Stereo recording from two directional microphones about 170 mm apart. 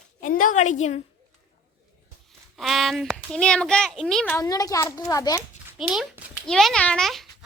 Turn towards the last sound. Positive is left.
turn(degrees=0)  # may be behind; listen again after turning